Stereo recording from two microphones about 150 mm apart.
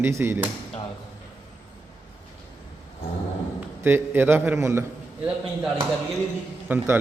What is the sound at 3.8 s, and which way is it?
A man's voice, 15° right (ahead or behind).